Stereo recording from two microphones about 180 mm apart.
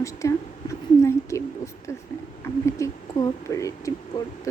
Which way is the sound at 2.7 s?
15° left (ahead or behind).